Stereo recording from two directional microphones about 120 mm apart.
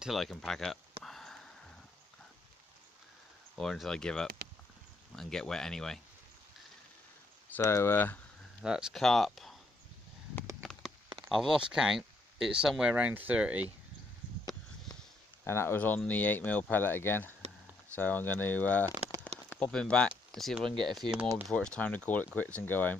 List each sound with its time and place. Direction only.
0.0 s speech: centre (ahead or behind)
1.0 s a sound: 5° left (ahead or behind)
3.5 s speech: 5° left (ahead or behind)
7.5 s speech: 20° left (ahead or behind)
8.6 s speech: 5° right (ahead or behind)
10.6 s a sound: 5° left (ahead or behind)
11.2 s speech: centre (ahead or behind)
14.9 s a sound: 30° left (ahead or behind)
15.4 s speech: 20° left (ahead or behind)